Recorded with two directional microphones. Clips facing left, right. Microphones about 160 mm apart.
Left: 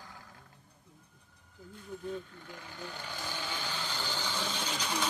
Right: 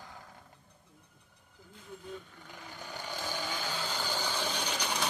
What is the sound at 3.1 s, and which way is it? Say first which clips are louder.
Vehicle: right 4 dB; 15° right (ahead or behind).